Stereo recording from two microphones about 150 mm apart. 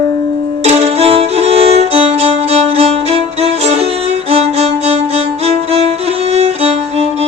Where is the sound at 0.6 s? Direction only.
45° right (ahead or behind).